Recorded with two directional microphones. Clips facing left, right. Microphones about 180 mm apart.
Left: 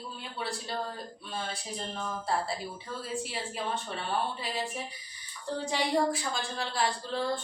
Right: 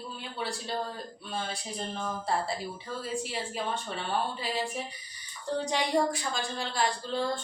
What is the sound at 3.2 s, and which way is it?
A woman's voice, centre (ahead or behind).